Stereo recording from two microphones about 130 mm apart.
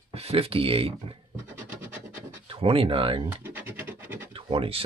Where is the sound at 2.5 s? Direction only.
45° right (ahead or behind).